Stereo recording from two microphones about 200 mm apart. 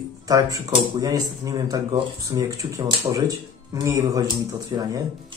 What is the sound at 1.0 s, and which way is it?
Speech, 20° right (ahead or behind).